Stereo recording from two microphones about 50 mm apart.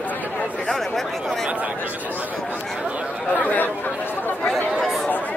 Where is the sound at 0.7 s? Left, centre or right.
Centre.